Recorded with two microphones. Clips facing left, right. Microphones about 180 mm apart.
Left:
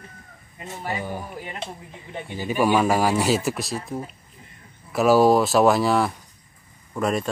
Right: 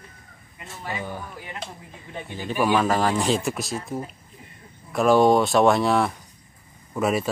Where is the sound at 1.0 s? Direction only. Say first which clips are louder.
Left 2 dB; 15° left (ahead or behind).